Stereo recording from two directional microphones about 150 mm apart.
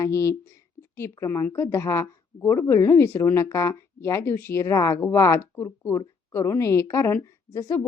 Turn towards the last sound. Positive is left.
turn(degrees=20)  # may be behind; listen again after turning